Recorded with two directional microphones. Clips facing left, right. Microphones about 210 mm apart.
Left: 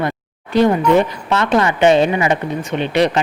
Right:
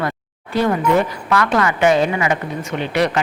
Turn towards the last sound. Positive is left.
turn(degrees=20)  # may be behind; listen again after turning